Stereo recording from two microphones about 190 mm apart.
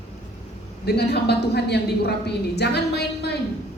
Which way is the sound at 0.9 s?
60° left (ahead or behind).